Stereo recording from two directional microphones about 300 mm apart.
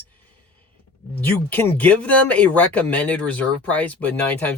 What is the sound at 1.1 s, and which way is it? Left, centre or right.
Speech, centre.